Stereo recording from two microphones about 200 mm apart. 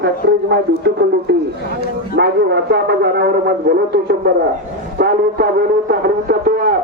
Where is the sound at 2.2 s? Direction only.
55° right (ahead or behind).